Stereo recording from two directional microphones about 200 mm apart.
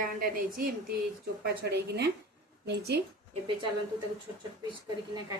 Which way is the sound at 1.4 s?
55° right (ahead or behind).